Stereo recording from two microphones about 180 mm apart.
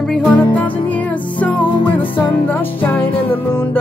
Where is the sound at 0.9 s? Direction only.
10° left (ahead or behind).